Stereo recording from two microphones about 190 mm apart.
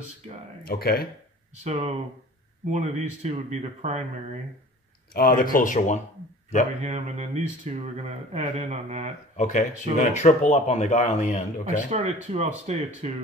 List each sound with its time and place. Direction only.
0.7 s speech: 55° left (ahead or behind)
1.5 s speech: 35° right (ahead or behind)
5.1 s speech: 50° left (ahead or behind)
6.8 s speech: 35° right (ahead or behind)
9.4 s speech: 40° left (ahead or behind)
11.9 s speech: 40° right (ahead or behind)